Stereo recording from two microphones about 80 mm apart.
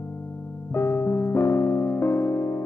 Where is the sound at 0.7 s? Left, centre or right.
Left.